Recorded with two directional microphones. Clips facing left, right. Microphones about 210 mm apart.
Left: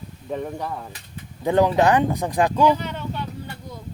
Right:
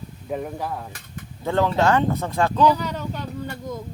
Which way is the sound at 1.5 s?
15° left (ahead or behind).